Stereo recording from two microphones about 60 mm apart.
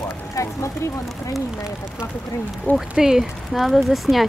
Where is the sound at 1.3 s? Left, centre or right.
Centre.